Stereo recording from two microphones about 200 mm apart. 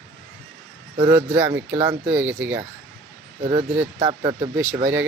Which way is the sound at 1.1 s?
10° right (ahead or behind).